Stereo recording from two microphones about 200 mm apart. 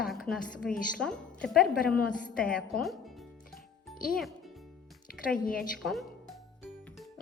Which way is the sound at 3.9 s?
45° left (ahead or behind).